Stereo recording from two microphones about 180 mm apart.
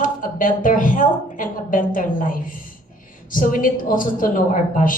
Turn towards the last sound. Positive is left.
turn(degrees=50)  # may be behind; listen again after turning